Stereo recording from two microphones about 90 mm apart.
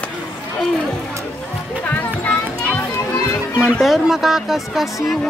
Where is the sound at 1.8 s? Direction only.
20° left (ahead or behind).